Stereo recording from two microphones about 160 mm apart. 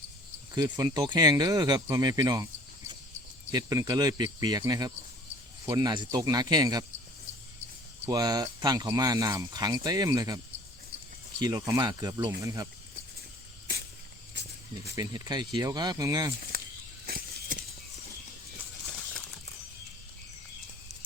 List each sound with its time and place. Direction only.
0.5 s speech: 25° right (ahead or behind)
3.5 s speech: 20° right (ahead or behind)
8.0 s speech: 25° right (ahead or behind)
14.9 s speech: 25° right (ahead or behind)
17.1 s a sound: 65° right (ahead or behind)